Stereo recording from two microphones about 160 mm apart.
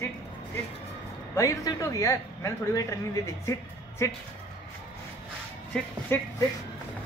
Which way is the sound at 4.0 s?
20° left (ahead or behind).